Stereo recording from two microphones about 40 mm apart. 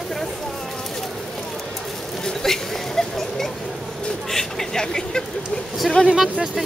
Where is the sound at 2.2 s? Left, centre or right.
Centre.